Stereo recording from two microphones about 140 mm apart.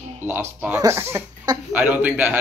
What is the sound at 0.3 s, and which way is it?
A man's voice, 15° right (ahead or behind).